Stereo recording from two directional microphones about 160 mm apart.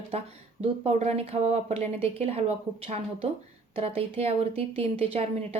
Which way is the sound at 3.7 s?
40° right (ahead or behind).